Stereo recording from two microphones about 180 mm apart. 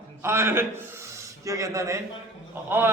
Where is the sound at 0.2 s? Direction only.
15° right (ahead or behind).